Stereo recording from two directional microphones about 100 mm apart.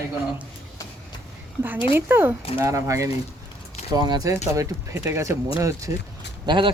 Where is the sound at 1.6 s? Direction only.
20° right (ahead or behind).